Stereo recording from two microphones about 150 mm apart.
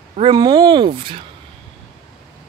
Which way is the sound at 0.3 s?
25° right (ahead or behind).